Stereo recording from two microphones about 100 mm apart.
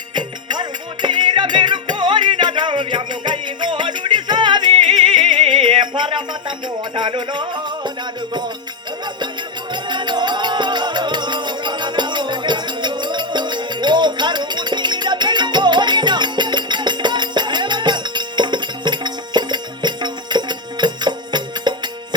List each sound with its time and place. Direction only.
0.1 s music: 50° right (ahead or behind)
9.9 s music: 50° right (ahead or behind)